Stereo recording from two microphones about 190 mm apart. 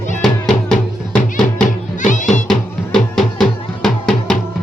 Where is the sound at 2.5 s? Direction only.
Centre (ahead or behind).